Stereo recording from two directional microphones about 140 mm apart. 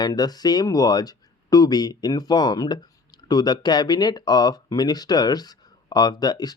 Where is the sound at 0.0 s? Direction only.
30° left (ahead or behind).